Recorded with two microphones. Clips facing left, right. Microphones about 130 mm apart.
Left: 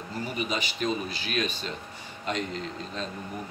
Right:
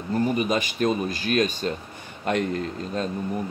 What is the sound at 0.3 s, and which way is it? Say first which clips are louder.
Speech: right 7 dB; 45° right (ahead or behind).